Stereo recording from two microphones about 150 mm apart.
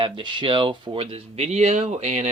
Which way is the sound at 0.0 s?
30° right (ahead or behind).